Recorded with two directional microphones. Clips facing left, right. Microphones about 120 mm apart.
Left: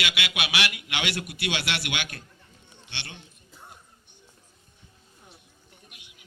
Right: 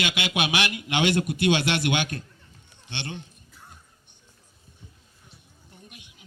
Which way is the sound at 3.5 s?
20° left (ahead or behind).